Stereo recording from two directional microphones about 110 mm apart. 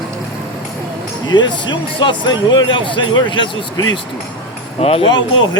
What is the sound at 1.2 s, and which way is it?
Speech, 40° left (ahead or behind).